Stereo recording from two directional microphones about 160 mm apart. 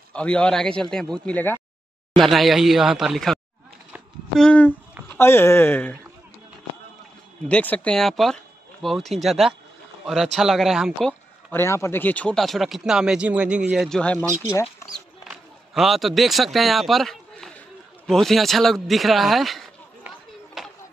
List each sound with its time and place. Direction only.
0.1 s speech: 5° left (ahead or behind)
2.1 s speech: centre (ahead or behind)
4.4 s speech: 10° left (ahead or behind)
7.4 s speech: 10° left (ahead or behind)
11.5 s speech: 15° left (ahead or behind)
14.4 s speech: 20° left (ahead or behind)
15.2 s a man's voice: centre (ahead or behind)
20.6 s a sound: centre (ahead or behind)